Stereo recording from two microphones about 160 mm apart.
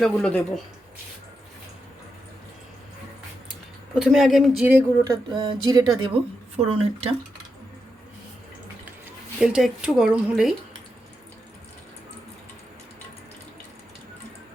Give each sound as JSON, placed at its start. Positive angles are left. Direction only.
{"t": 0.0, "sound": "speech", "side_deg": 5}
{"t": 3.9, "sound": "speech", "side_deg": 0}
{"t": 5.3, "sound": "speech", "side_deg": -25}
{"t": 6.6, "sound": "speech", "side_deg": -40}
{"t": 9.4, "sound": "speech", "side_deg": 0}